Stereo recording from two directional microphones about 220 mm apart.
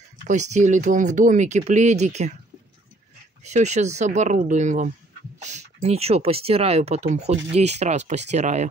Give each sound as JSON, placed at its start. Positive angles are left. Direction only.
{"t": 0.3, "sound": "speech", "side_deg": -35}
{"t": 3.4, "sound": "speech", "side_deg": -30}